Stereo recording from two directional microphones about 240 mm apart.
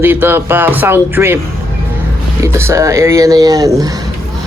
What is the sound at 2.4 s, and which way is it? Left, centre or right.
Speech, centre.